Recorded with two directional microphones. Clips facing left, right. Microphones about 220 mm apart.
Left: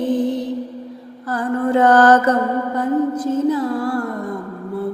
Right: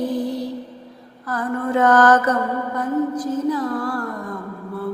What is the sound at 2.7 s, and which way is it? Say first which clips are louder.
Music: left 2 dB; 25° left (ahead or behind).